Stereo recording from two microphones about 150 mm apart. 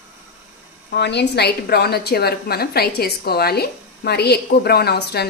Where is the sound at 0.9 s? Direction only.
90° left.